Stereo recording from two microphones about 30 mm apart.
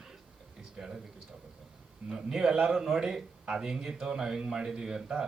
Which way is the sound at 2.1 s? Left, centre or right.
Centre.